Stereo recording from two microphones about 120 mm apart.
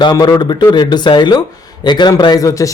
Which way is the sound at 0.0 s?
35° left (ahead or behind).